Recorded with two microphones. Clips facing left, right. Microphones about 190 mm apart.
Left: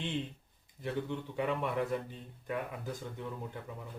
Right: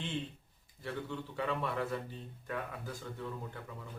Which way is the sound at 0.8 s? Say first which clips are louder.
Left 4 dB; 20° left (ahead or behind).